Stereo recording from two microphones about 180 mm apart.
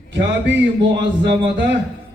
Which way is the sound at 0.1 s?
80° right.